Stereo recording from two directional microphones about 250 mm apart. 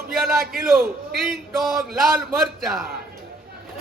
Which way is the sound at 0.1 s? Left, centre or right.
Centre.